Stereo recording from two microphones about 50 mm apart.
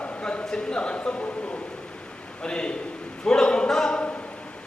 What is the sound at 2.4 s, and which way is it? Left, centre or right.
A man's voice, centre.